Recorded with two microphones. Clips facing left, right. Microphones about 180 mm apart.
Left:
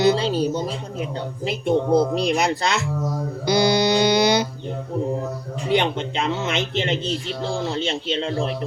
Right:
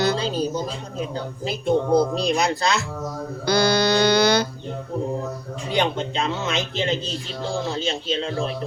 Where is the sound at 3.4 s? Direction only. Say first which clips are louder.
Left 1 dB; 20° left (ahead or behind).